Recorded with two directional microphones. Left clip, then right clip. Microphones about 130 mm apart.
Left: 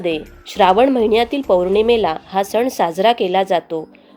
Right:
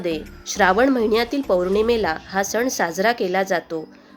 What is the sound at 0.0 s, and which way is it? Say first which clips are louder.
A woman's voice: left 4 dB; 25° left (ahead or behind).